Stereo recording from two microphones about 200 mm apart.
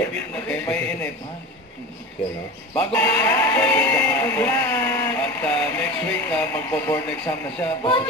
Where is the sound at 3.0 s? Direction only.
15° left (ahead or behind).